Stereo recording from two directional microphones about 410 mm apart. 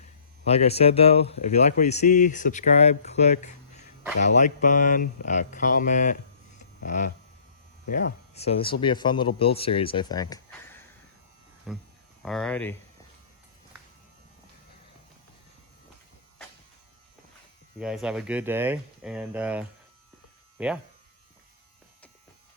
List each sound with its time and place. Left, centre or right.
0.4 s speech: centre
6.6 s a sound: centre
7.9 s speech: centre
17.7 s speech: centre